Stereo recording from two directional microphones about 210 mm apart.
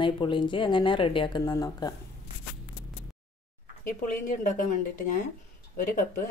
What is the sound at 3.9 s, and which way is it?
Speech, 40° left (ahead or behind).